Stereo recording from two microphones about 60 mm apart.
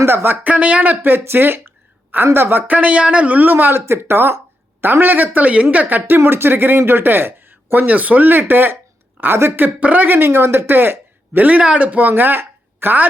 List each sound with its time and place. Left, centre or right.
0.0 s speech: right
0.4 s speech: right
2.7 s speech: right
11.4 s speech: right